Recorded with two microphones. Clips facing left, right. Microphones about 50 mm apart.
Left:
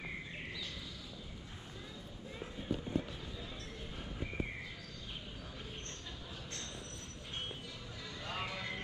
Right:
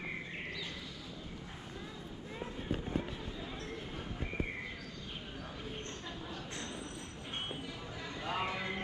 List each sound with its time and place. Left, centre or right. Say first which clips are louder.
8.2 s music: right 5 dB; centre